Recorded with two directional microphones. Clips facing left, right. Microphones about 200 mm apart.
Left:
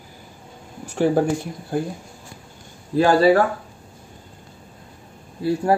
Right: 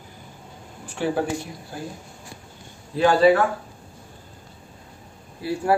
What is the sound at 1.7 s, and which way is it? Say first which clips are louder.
Speech: left 11 dB; 55° left (ahead or behind).